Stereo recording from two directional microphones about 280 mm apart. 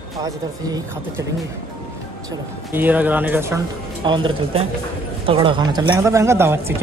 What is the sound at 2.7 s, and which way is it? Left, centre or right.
Speech, centre.